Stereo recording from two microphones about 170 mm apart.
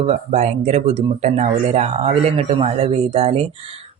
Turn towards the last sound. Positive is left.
turn(degrees=-35)  # may be behind; listen again after turning